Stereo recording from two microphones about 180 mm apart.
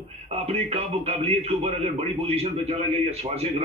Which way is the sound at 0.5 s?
35° right (ahead or behind).